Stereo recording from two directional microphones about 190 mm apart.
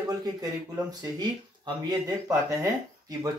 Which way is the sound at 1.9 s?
20° right (ahead or behind).